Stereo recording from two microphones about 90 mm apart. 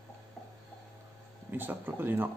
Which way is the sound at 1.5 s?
20° right (ahead or behind).